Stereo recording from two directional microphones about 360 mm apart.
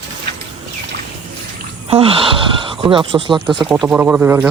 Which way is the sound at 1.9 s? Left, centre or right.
Centre.